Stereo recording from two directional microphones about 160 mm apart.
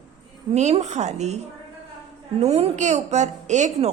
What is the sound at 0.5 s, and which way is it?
A woman's voice, 45° right (ahead or behind).